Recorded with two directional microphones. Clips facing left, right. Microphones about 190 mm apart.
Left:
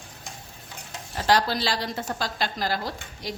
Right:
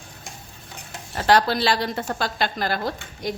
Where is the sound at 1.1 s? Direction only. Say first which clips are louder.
Right 4 dB; 60° right (ahead or behind).